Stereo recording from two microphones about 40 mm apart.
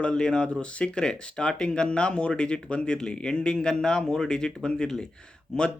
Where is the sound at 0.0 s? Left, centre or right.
Left.